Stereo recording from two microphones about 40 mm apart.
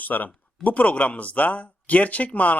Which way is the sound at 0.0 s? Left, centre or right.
Left.